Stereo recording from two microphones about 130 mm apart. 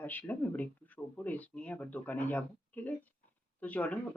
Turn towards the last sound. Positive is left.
turn(degrees=10)  # may be behind; listen again after turning